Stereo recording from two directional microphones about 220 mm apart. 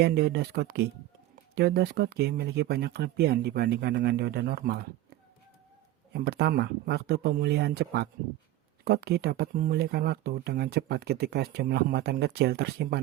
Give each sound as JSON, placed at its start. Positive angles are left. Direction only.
{"t": 0.0, "sound": "speech", "side_deg": -50}
{"t": 6.1, "sound": "speech", "side_deg": -45}